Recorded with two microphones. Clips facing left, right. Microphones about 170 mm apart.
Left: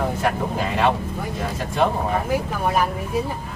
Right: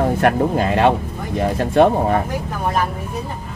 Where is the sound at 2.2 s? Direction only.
5° left (ahead or behind).